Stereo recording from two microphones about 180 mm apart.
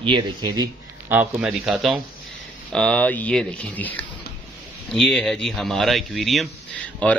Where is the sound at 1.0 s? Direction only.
10° right (ahead or behind).